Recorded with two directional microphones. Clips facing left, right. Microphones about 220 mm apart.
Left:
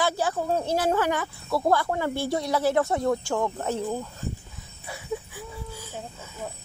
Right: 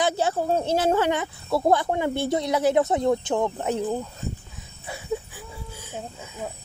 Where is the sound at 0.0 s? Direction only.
25° right (ahead or behind).